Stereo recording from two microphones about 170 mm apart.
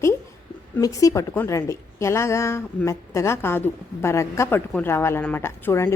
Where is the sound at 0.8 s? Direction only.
20° left (ahead or behind).